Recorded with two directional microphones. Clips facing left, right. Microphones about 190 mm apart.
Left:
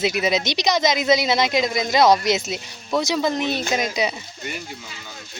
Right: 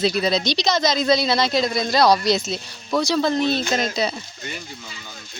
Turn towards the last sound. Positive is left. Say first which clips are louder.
# even
turn(degrees=15)  # may be behind; listen again after turning